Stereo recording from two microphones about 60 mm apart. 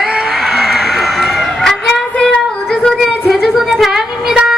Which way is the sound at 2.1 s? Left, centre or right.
Centre.